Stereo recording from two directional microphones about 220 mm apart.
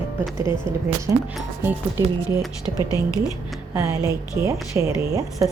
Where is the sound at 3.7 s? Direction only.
10° right (ahead or behind).